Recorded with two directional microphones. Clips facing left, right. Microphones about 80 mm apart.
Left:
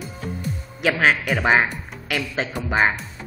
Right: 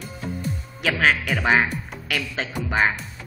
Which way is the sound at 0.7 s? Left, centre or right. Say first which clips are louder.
Left 2 dB; centre.